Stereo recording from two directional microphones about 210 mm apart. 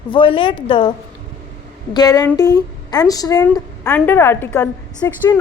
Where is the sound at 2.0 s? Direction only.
20° left (ahead or behind).